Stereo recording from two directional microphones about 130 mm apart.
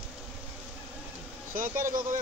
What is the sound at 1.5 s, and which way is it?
Vehicle, 90° right.